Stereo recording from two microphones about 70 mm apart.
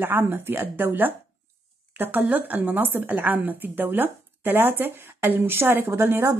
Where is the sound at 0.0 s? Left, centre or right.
Right.